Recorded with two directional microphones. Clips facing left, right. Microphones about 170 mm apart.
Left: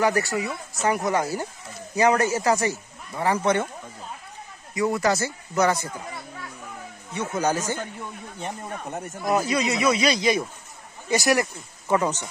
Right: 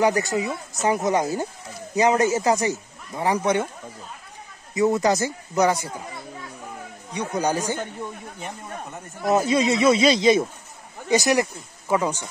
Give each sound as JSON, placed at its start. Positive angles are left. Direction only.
{"t": 0.0, "sound": "a man's voice", "side_deg": -20}
{"t": 4.7, "sound": "a man's voice", "side_deg": -20}
{"t": 7.1, "sound": "a man's voice", "side_deg": -15}
{"t": 8.4, "sound": "speech", "side_deg": 30}
{"t": 9.2, "sound": "a man's voice", "side_deg": -25}